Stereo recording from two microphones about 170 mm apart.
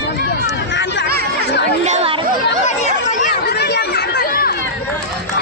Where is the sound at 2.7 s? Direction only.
45° left (ahead or behind).